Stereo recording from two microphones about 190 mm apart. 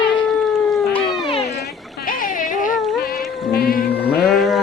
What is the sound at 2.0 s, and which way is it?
Music, 45° left (ahead or behind).